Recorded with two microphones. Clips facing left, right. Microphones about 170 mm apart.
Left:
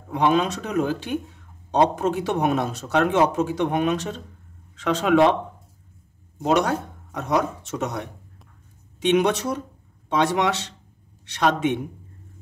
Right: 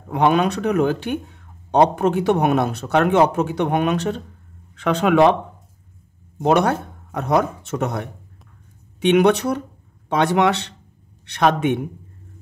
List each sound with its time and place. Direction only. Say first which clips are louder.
0.1 s a man's voice: right 3 dB; 60° right (ahead or behind)
6.4 s a man's voice: right 4 dB; 55° right (ahead or behind)